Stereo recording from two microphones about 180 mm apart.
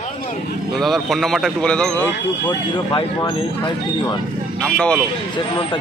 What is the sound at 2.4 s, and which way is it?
Speech, 25° left (ahead or behind).